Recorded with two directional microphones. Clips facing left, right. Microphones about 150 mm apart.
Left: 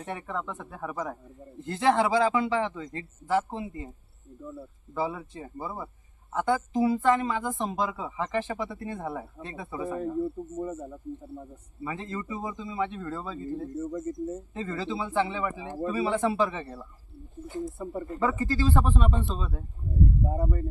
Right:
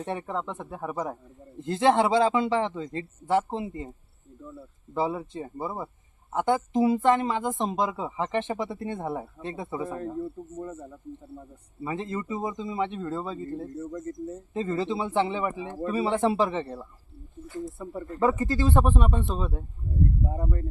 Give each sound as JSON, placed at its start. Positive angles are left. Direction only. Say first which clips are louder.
{"t": 0.0, "sound": "speech", "louder": "right 3 dB", "side_deg": -25}
{"t": 4.9, "sound": "speech", "louder": "right 3 dB", "side_deg": -25}
{"t": 9.8, "sound": "speech", "louder": "left 6 dB", "side_deg": 5}
{"t": 11.9, "sound": "speech", "louder": "right 4 dB", "side_deg": -20}
{"t": 13.5, "sound": "speech", "louder": "left 2 dB", "side_deg": 5}
{"t": 14.5, "sound": "speech", "louder": "right 4 dB", "side_deg": -20}
{"t": 17.6, "sound": "speech", "louder": "left 1 dB", "side_deg": 0}
{"t": 18.2, "sound": "speech", "louder": "right 3 dB", "side_deg": -20}
{"t": 20.3, "sound": "speech", "louder": "left 2 dB", "side_deg": 5}